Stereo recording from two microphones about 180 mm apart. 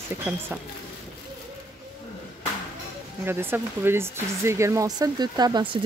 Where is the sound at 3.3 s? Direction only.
10° right (ahead or behind).